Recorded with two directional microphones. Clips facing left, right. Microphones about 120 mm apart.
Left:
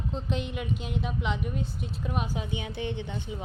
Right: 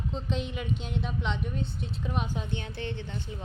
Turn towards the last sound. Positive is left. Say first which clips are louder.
# left 3 dB
turn(degrees=15)  # may be behind; listen again after turning